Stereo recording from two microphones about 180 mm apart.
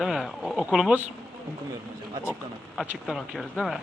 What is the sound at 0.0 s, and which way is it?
A man's voice, centre (ahead or behind).